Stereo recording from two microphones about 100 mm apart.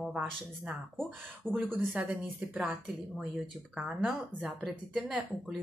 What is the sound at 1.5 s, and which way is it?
A woman's voice, 20° right (ahead or behind).